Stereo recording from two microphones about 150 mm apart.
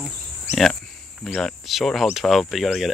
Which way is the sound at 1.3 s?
Centre (ahead or behind).